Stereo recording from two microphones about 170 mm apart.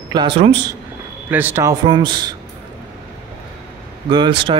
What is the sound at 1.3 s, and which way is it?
A man's voice, 10° right (ahead or behind).